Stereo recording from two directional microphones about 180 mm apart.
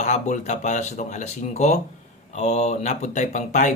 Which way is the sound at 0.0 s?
40° left (ahead or behind).